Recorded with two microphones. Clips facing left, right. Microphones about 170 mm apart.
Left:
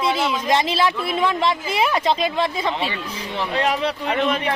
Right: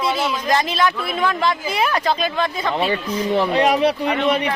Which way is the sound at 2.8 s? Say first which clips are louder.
Right 7 dB; 45° right (ahead or behind).